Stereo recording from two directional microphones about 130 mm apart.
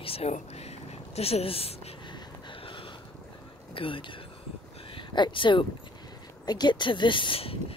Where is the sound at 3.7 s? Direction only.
45° left (ahead or behind).